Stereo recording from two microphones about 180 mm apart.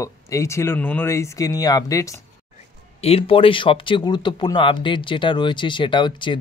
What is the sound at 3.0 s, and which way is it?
Speech, 35° left (ahead or behind).